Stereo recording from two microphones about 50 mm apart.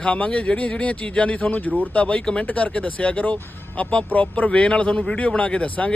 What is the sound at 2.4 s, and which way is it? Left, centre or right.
Speech, left.